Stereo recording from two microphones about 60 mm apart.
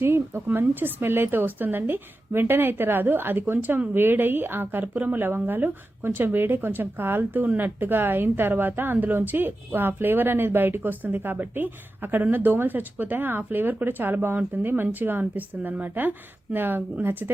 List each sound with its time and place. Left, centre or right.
0.0 s speech: right